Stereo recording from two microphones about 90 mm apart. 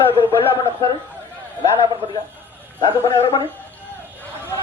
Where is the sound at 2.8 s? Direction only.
60° left (ahead or behind).